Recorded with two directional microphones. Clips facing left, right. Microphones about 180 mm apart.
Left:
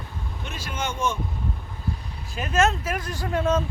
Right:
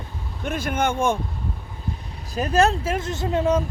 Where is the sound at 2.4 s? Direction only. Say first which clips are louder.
Right 3 dB; 35° right (ahead or behind); by 3.6 s 15° right (ahead or behind).